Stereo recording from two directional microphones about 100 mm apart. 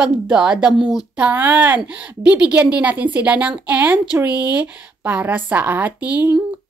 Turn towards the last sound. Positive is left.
turn(degrees=-15)  # may be behind; listen again after turning